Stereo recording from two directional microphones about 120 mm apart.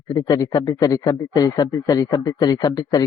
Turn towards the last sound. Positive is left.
turn(degrees=30)  # may be behind; listen again after turning